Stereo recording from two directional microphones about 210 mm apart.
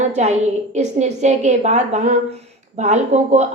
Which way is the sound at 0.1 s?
35° right (ahead or behind).